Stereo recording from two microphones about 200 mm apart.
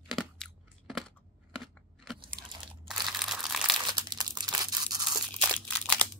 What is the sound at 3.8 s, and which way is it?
Tearing, 20° right (ahead or behind).